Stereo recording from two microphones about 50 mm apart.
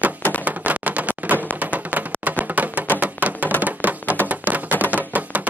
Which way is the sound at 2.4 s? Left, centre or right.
Right.